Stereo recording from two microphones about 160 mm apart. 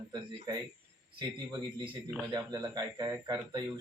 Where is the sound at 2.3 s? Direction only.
25° right (ahead or behind).